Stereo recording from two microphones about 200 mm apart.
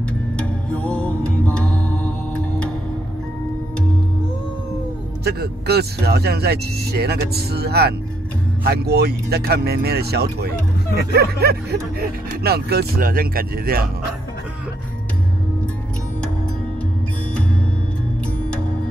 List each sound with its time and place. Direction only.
0.4 s music: 5° left (ahead or behind)
5.2 s speech: 55° right (ahead or behind)